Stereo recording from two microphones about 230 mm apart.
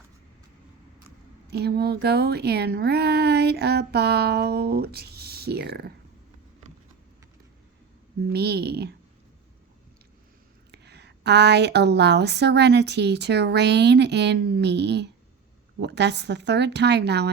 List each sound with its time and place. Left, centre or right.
1.5 s a woman's voice: right
8.3 s a woman's voice: right
10.7 s a woman's voice: right